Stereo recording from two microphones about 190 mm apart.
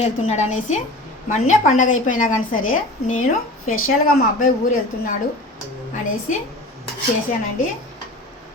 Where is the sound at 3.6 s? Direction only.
90° left.